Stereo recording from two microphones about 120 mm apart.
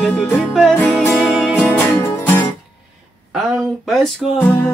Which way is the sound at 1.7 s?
15° left (ahead or behind).